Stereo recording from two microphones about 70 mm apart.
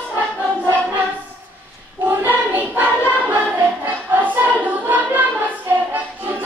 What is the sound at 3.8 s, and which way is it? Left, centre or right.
Music, right.